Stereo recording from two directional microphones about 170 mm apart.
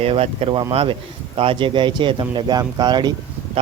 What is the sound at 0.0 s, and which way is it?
Speech, 35° right (ahead or behind).